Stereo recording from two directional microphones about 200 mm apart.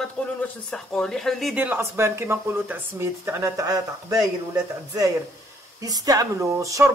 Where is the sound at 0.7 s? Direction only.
5° left (ahead or behind); by 4.2 s 20° right (ahead or behind).